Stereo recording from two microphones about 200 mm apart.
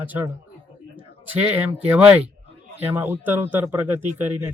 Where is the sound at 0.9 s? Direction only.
10° right (ahead or behind).